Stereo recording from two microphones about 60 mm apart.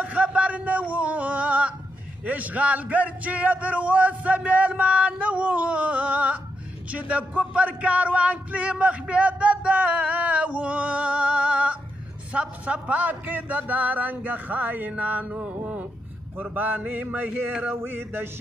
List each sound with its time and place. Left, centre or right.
0.0 s a sound: right
2.2 s speech: right
16.5 s mantra: right